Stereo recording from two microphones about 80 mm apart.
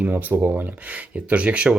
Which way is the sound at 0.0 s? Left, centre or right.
Right.